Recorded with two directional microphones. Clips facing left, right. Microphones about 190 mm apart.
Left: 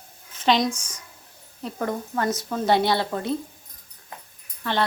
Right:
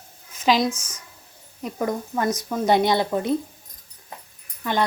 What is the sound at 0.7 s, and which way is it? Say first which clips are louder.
Speech: even; 10° left (ahead or behind).